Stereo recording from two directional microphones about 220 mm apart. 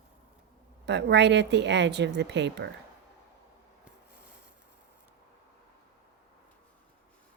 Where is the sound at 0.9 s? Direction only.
50° right (ahead or behind).